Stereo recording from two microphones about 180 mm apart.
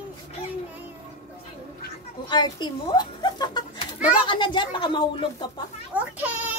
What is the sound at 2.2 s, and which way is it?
Speech, 25° left (ahead or behind).